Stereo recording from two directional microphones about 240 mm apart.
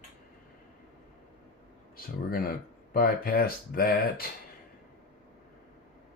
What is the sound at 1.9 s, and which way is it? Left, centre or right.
Speech, left.